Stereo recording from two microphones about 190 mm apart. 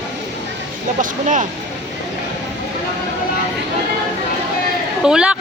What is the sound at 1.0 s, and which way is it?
Speech, 40° right (ahead or behind).